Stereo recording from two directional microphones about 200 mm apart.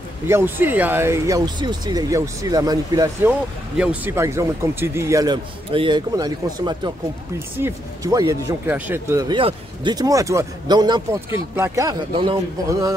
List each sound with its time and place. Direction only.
0.3 s speech: 10° right (ahead or behind)
3.3 s speech: 5° right (ahead or behind)